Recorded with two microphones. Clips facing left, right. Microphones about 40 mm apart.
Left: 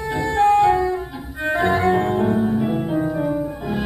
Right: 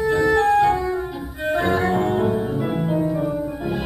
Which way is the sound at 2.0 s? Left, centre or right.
Centre.